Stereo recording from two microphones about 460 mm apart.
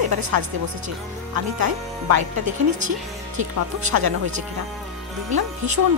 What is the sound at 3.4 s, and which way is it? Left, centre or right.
Speech, right.